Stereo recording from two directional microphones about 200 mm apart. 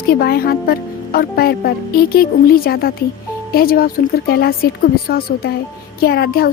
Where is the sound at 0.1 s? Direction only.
50° left (ahead or behind).